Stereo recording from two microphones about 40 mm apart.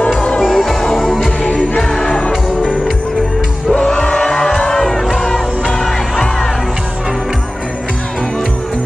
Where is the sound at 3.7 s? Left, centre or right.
Left; by 6.5 s centre.